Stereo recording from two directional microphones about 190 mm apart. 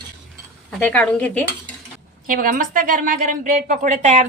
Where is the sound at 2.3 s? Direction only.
45° right (ahead or behind).